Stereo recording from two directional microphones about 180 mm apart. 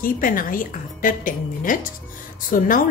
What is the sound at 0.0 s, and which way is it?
A woman's voice, 50° left (ahead or behind).